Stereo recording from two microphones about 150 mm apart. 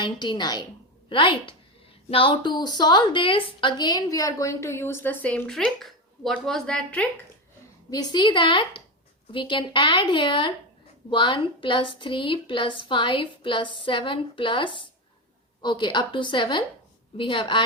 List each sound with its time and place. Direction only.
0.0 s a woman's voice: 30° left (ahead or behind); by 7.1 s 5° left (ahead or behind)
7.9 s a woman's voice: 25° left (ahead or behind)